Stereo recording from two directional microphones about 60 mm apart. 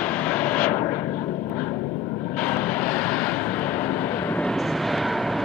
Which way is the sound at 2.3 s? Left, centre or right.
Left.